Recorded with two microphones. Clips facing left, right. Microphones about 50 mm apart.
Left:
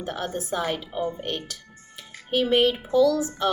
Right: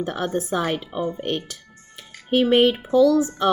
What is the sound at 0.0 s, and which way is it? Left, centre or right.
Music, right.